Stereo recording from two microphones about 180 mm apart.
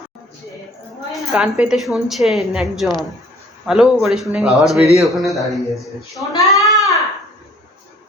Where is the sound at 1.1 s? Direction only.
5° right (ahead or behind).